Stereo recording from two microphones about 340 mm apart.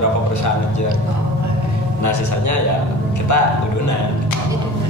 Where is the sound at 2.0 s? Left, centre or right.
Left.